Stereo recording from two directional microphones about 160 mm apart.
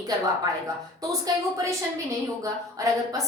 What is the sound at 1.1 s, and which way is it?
A woman's voice, 20° right (ahead or behind).